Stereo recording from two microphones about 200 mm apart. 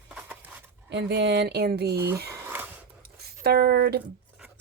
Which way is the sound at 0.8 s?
60° right (ahead or behind).